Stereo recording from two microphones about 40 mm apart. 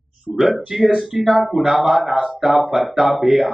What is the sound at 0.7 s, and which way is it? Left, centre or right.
Speech, centre.